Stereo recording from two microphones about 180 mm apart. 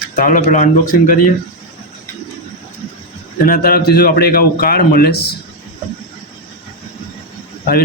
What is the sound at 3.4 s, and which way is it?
A man's voice, 55° left (ahead or behind).